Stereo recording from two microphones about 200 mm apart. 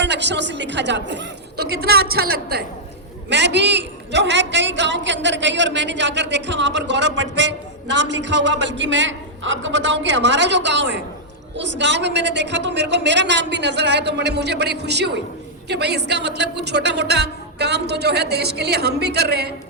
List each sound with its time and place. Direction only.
0.0 s a woman's voice: 60° right (ahead or behind)